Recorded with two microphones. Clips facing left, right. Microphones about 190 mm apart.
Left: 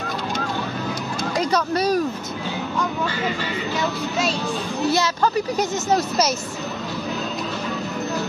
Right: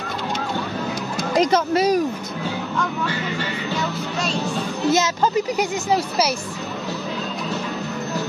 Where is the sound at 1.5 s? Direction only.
20° right (ahead or behind).